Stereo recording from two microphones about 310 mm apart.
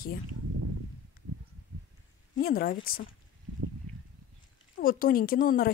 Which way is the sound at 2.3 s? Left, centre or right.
Left.